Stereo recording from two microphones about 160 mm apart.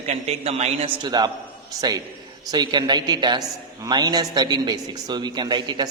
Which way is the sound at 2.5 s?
25° right (ahead or behind).